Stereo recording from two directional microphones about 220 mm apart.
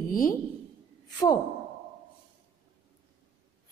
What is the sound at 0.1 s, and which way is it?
Speech, 40° left (ahead or behind).